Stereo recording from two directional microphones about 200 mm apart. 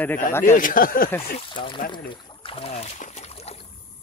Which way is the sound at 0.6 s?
45° left (ahead or behind).